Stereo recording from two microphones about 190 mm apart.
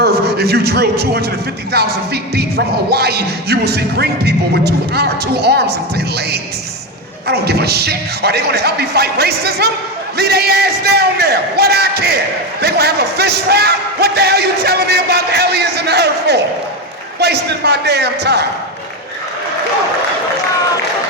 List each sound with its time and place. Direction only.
0.0 s a man's voice: 55° right (ahead or behind)
1.7 s music: 60° right (ahead or behind)
7.3 s music: 60° right (ahead or behind)